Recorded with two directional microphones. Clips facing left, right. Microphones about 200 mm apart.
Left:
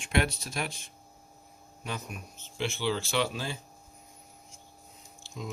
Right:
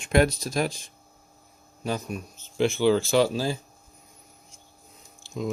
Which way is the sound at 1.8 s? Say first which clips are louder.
Right 9 dB; 35° right (ahead or behind).